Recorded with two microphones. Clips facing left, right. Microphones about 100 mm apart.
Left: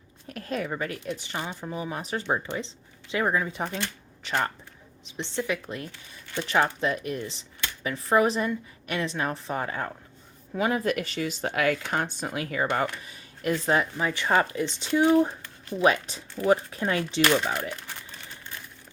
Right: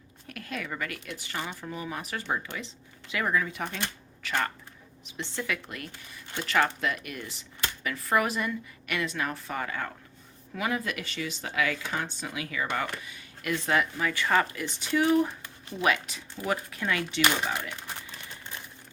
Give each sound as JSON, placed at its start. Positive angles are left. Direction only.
{"t": 0.3, "sound": "speech", "side_deg": 35}